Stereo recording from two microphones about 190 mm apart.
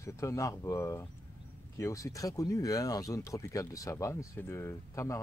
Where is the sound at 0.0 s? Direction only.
15° left (ahead or behind).